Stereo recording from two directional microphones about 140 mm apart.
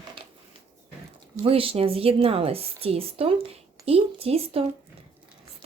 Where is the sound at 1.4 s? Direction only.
40° right (ahead or behind).